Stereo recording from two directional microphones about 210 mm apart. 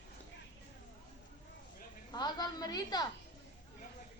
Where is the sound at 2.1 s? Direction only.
20° left (ahead or behind).